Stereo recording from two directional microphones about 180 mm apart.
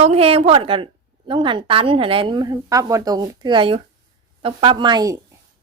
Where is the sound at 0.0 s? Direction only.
35° right (ahead or behind).